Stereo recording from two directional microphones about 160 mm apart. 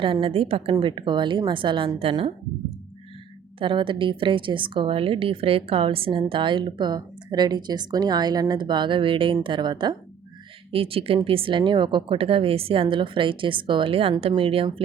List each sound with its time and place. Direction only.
0.0 s a woman's voice: 35° right (ahead or behind)